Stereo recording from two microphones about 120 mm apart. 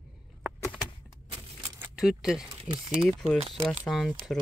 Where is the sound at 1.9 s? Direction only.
5° right (ahead or behind).